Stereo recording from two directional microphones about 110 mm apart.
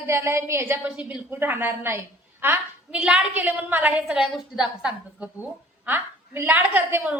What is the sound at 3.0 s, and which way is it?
A woman's voice, 5° right (ahead or behind).